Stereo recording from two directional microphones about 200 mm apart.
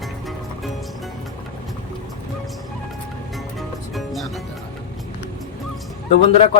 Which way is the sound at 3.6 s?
Centre (ahead or behind).